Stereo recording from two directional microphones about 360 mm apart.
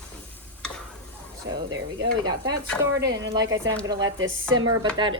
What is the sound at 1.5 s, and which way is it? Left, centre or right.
Speech, right.